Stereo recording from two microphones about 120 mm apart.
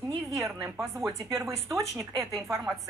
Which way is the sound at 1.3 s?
25° right (ahead or behind).